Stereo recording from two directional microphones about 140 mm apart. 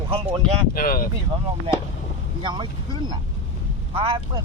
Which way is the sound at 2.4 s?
35° right (ahead or behind).